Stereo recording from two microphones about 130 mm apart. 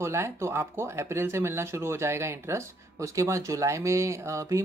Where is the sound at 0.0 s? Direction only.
20° right (ahead or behind).